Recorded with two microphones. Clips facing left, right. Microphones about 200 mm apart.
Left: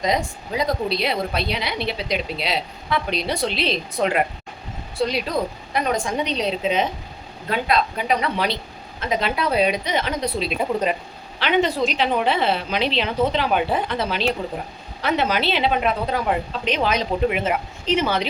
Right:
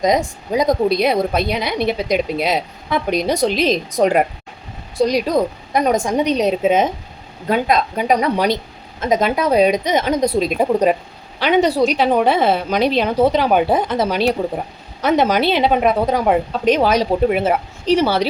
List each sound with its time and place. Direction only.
0.0 s a woman's voice: 45° right (ahead or behind)
15.5 s a woman's voice: 50° right (ahead or behind); by 18.3 s 35° right (ahead or behind)